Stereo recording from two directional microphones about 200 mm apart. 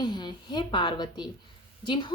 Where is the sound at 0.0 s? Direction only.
20° left (ahead or behind).